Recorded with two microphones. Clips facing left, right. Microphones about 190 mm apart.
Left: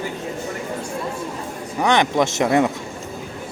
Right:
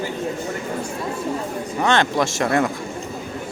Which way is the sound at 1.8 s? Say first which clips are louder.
Left 2 dB; 20° left (ahead or behind).